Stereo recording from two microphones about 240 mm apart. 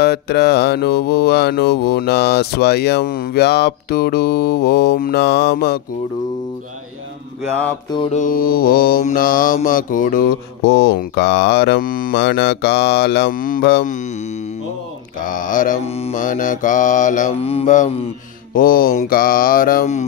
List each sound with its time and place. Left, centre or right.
0.0 s mantra: left
7.9 s mantra: left
8.2 s mantra: left